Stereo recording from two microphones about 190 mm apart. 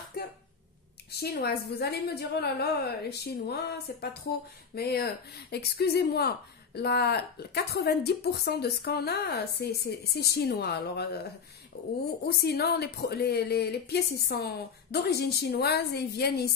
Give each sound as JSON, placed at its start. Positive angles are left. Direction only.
{"t": 0.2, "sound": "a sound", "side_deg": 55}
{"t": 1.2, "sound": "a woman's voice", "side_deg": 55}
{"t": 12.3, "sound": "a woman's voice", "side_deg": 55}